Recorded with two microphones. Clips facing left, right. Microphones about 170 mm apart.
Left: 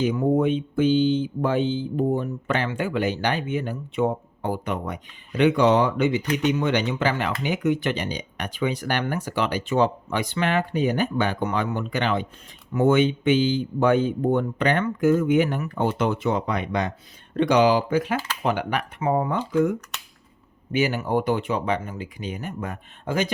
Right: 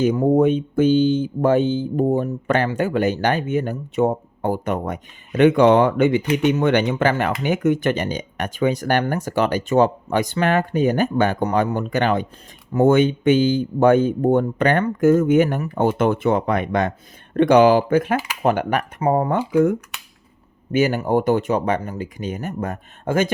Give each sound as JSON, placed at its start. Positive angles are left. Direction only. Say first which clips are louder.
{"t": 0.0, "sound": "speech", "louder": "right 5 dB", "side_deg": -45}
{"t": 20.7, "sound": "speech", "louder": "right 5 dB", "side_deg": -45}